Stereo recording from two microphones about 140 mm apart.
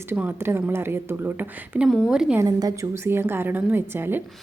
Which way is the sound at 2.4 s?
25° right (ahead or behind).